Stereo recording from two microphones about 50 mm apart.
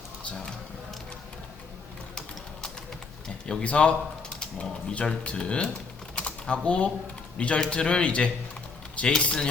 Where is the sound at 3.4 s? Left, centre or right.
Left.